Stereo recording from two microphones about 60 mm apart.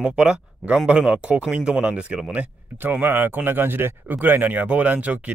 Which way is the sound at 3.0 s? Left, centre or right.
Right.